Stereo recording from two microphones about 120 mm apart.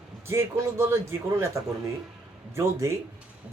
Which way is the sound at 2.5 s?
25° right (ahead or behind).